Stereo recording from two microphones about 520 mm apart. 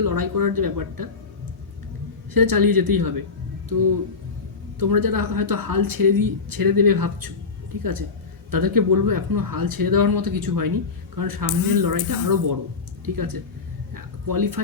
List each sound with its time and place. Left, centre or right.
0.0 s speech: right
2.3 s speech: right
8.4 s speech: right
13.9 s a sound: right